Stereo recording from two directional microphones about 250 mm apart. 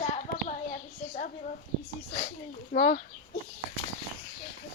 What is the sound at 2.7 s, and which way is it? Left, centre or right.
Speech, left.